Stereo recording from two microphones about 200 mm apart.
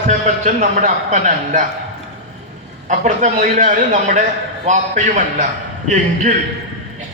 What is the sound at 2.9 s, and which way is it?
A man's voice, 40° right (ahead or behind).